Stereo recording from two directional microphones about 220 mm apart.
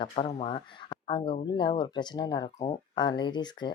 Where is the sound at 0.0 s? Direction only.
25° left (ahead or behind).